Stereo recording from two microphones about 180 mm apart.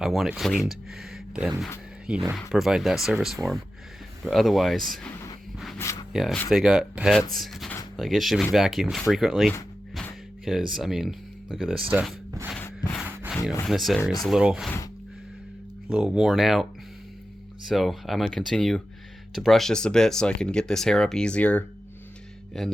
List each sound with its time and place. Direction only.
0.0 s speech: centre (ahead or behind)
5.7 s a sound: 15° left (ahead or behind)
6.1 s speech: centre (ahead or behind)
11.9 s speech: 10° right (ahead or behind)
12.5 s a sound: 10° left (ahead or behind)
13.0 s rub: 10° right (ahead or behind)
13.3 s speech: 5° left (ahead or behind)
14.0 s speech: 20° left (ahead or behind)
14.3 s speech: 5° right (ahead or behind)
15.9 s speech: 5° right (ahead or behind)
17.7 s speech: centre (ahead or behind)